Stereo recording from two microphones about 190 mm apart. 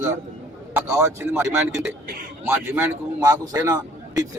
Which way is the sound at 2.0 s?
55° right (ahead or behind).